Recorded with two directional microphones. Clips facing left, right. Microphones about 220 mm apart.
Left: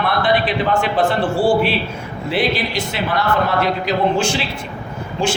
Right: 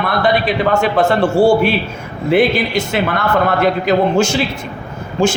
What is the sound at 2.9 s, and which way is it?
A man's voice, 50° right (ahead or behind).